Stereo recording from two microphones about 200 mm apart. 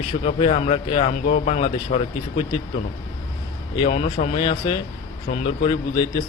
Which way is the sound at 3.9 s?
35° left (ahead or behind).